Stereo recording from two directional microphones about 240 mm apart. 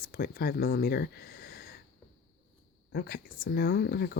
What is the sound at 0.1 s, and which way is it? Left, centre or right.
Speech, left.